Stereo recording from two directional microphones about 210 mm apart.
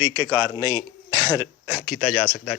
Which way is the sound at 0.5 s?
20° left (ahead or behind).